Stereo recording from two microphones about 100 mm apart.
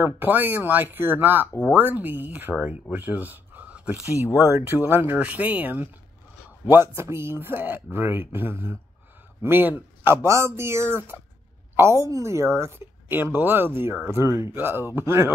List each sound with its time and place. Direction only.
0.0 s speech: 20° right (ahead or behind)